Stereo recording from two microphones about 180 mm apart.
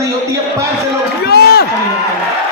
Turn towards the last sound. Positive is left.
turn(degrees=60)  # may be behind; listen again after turning